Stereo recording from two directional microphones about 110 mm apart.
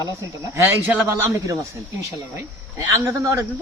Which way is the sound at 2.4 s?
25° right (ahead or behind).